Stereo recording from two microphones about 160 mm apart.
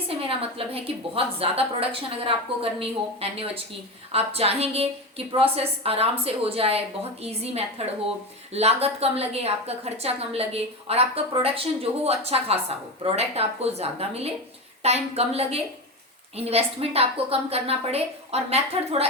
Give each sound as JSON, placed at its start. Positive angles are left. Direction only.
{"t": 0.1, "sound": "a woman's voice", "side_deg": -35}